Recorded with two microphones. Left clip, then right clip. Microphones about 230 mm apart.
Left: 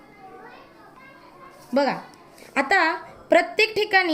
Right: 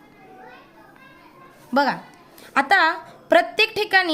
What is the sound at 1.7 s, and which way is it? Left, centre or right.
A woman's voice, right.